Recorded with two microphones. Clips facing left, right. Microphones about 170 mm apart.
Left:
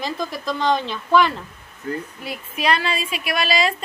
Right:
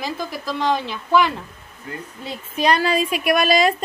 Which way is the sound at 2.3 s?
35° right (ahead or behind).